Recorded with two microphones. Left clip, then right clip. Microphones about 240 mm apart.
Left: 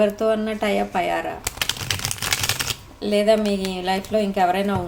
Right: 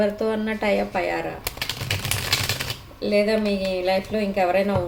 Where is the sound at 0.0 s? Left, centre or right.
Left.